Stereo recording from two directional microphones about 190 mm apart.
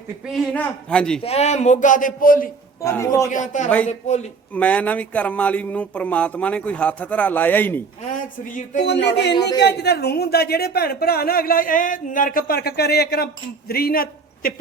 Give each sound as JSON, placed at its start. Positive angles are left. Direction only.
{"t": 0.3, "sound": "a man's voice", "side_deg": 5}
{"t": 1.2, "sound": "speech", "side_deg": 35}
{"t": 2.8, "sound": "speech", "side_deg": 15}
{"t": 3.2, "sound": "speech", "side_deg": 40}
{"t": 4.5, "sound": "speech", "side_deg": 5}
{"t": 8.1, "sound": "speech", "side_deg": 45}
{"t": 8.8, "sound": "speech", "side_deg": 65}